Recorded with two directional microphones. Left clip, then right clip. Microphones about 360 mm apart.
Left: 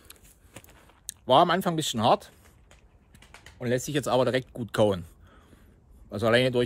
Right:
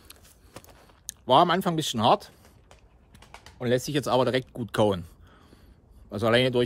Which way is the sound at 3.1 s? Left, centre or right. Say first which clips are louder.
Right 2 dB; right.